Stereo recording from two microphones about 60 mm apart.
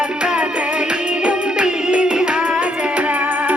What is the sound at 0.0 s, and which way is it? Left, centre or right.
Music, centre.